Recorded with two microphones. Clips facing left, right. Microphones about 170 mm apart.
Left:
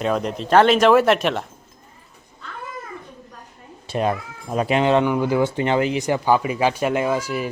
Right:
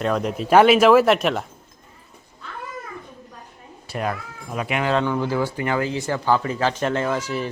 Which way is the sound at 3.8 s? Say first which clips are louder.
Left 5 dB; 25° left (ahead or behind).